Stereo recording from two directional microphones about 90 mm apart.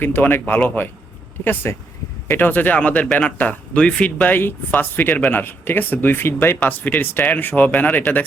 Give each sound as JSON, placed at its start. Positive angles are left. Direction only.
{"t": 0.0, "sound": "speech", "side_deg": 25}